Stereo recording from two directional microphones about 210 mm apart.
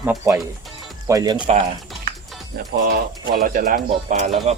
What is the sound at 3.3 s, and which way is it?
Speech, 45° right (ahead or behind).